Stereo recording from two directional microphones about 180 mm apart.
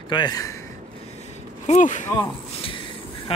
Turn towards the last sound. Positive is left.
turn(degrees=35)  # may be behind; listen again after turning